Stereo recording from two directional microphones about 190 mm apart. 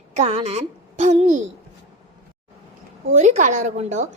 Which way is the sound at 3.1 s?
40° right (ahead or behind).